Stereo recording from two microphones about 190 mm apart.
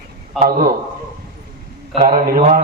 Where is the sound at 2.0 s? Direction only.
50° right (ahead or behind).